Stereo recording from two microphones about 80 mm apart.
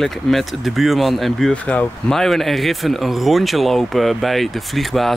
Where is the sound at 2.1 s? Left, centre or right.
Centre.